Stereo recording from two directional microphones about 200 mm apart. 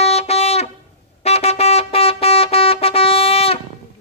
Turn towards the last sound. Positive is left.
turn(degrees=30)  # may be behind; listen again after turning